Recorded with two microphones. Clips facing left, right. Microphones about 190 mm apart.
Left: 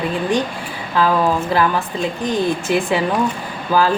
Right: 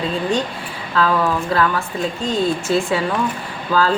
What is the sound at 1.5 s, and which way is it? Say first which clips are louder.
A woman's voice: left 1 dB; 15° left (ahead or behind).